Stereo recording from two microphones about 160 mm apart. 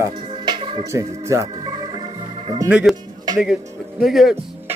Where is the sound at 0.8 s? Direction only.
20° right (ahead or behind).